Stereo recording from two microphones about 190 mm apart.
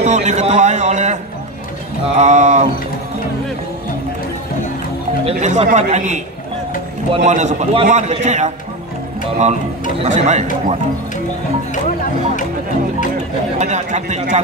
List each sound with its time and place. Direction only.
0.0 s a sound: 40° right (ahead or behind)
2.1 s a man's voice: 35° right (ahead or behind)
5.2 s a man's voice: 35° right (ahead or behind)
11.7 s speech: 40° left (ahead or behind)
13.6 s a man's voice: 35° right (ahead or behind)